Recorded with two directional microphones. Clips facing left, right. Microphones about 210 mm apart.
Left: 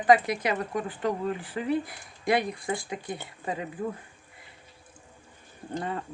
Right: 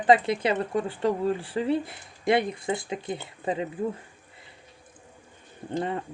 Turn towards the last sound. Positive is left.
turn(degrees=-20)  # may be behind; listen again after turning